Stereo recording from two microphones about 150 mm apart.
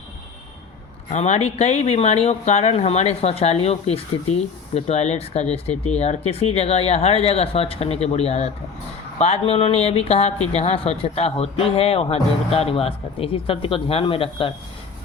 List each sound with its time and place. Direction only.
1.1 s speech: 50° left (ahead or behind)